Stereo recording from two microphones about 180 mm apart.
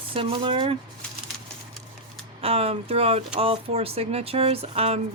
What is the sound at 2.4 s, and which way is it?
Speech, 35° right (ahead or behind).